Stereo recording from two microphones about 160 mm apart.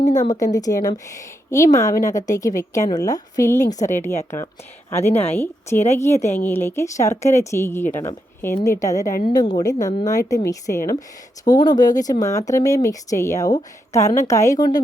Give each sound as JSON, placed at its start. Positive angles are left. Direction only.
{"t": 0.0, "sound": "a woman's voice", "side_deg": 50}
{"t": 0.3, "sound": "a woman's voice", "side_deg": 20}
{"t": 3.7, "sound": "a woman's voice", "side_deg": 50}
{"t": 4.9, "sound": "a woman's voice", "side_deg": 15}